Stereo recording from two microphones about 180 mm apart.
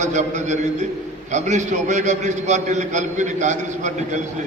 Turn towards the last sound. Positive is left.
turn(degrees=-40)  # may be behind; listen again after turning